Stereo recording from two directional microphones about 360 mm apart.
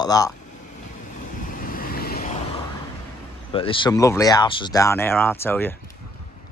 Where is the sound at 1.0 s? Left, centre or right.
Left.